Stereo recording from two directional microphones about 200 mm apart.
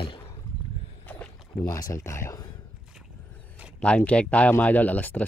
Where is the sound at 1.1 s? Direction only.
10° left (ahead or behind).